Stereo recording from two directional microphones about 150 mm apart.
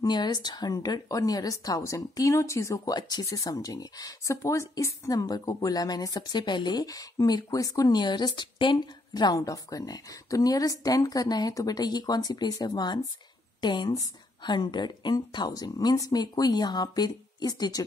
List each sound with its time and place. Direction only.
0.0 s a woman's voice: 30° left (ahead or behind)